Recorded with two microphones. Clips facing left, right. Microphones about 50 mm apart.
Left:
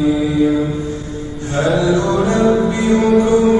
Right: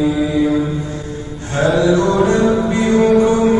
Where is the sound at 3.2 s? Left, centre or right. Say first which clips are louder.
Left 1 dB; right.